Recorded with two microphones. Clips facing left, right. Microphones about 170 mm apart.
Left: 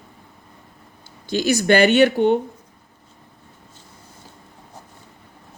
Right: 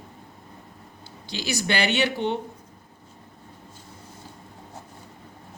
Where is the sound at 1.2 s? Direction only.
45° left (ahead or behind).